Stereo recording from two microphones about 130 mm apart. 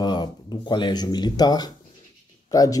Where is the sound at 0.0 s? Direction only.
35° left (ahead or behind).